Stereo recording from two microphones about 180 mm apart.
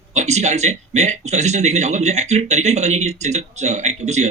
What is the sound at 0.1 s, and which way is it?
Speech, 40° right (ahead or behind).